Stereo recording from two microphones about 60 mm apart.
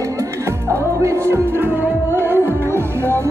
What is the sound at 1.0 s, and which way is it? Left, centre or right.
Music, right.